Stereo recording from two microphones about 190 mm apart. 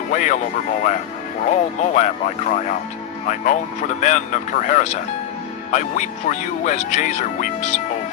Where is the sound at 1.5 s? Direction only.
40° left (ahead or behind).